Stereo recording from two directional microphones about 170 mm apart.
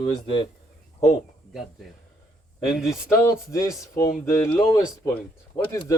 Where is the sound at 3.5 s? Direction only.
20° left (ahead or behind).